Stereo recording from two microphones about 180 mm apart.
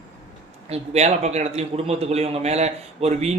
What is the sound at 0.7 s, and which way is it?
A man's voice, 35° right (ahead or behind).